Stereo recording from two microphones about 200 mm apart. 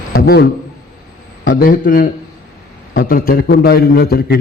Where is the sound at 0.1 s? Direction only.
50° left (ahead or behind).